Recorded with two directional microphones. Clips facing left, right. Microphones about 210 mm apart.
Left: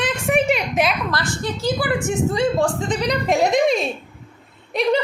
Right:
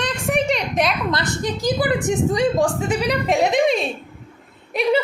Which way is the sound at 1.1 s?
20° right (ahead or behind).